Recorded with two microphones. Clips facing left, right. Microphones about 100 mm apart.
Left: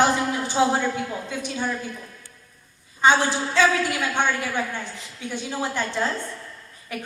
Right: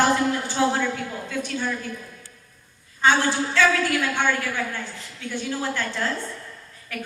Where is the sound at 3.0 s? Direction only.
20° left (ahead or behind).